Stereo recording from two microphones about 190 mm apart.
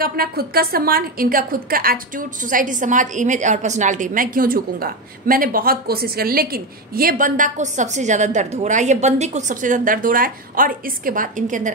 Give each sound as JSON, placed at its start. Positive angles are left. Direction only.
{"t": 0.0, "sound": "a woman's voice", "side_deg": -50}